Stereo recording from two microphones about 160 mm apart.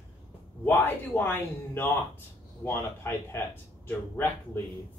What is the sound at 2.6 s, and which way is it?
Speech, 15° left (ahead or behind).